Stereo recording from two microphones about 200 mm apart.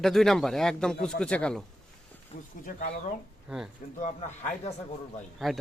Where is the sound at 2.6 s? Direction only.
40° left (ahead or behind).